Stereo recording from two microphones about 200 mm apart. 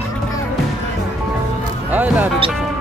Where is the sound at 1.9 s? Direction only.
10° right (ahead or behind).